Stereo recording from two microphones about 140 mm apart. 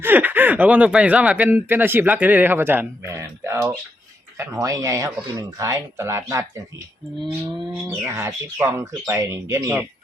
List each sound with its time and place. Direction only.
0.0 s speech: 15° right (ahead or behind)
7.9 s speech: 20° right (ahead or behind)